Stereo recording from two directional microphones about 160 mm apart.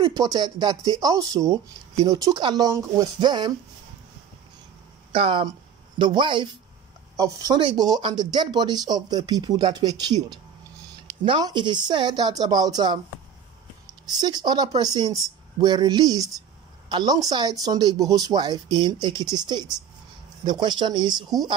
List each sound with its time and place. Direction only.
0.0 s speech: 25° right (ahead or behind)
5.1 s speech: 30° right (ahead or behind)
11.2 s speech: 30° right (ahead or behind)
14.2 s speech: 25° right (ahead or behind)